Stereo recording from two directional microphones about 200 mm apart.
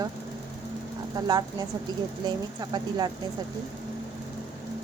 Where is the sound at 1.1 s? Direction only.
20° right (ahead or behind).